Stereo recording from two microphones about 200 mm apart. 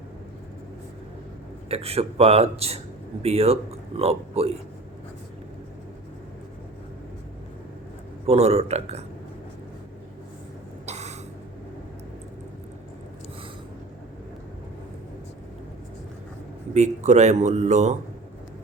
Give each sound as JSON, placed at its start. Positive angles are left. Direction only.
{"t": 1.7, "sound": "speech", "side_deg": -30}
{"t": 8.3, "sound": "speech", "side_deg": -30}
{"t": 10.8, "sound": "a sound", "side_deg": -35}
{"t": 16.7, "sound": "speech", "side_deg": -35}